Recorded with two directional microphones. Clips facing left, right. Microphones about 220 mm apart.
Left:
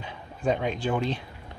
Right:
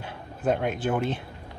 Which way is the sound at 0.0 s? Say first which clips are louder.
Right 1 dB; 5° right (ahead or behind).